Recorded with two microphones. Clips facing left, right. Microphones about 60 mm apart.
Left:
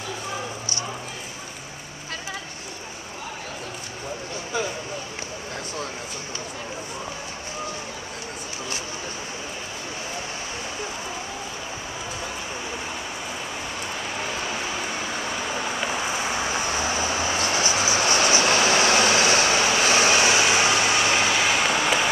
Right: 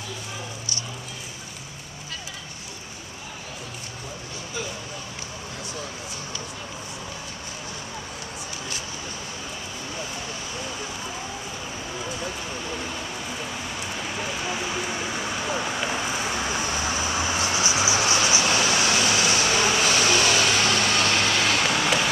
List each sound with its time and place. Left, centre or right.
14.2 s vehicle: centre
17.4 s insect: centre
18.4 s vehicle: left; by 22.1 s centre